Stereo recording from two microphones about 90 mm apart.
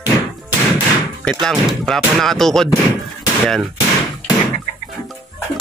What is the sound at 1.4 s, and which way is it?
Speech, 5° left (ahead or behind).